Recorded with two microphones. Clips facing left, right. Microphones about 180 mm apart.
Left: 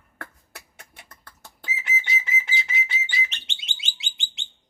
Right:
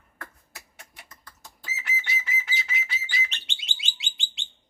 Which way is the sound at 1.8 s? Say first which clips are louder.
Left 2 dB; 25° left (ahead or behind).